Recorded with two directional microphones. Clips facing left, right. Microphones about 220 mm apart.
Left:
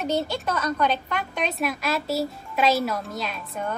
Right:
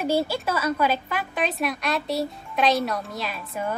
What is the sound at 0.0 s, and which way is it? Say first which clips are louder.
A woman's voice: right 2 dB; 10° right (ahead or behind).